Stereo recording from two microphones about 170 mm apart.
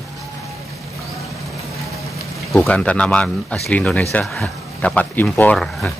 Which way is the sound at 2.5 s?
5° left (ahead or behind).